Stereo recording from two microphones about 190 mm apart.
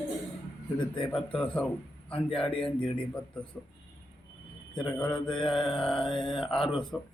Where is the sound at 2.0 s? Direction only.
5° left (ahead or behind).